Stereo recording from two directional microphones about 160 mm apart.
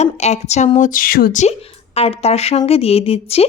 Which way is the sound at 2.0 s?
40° left (ahead or behind).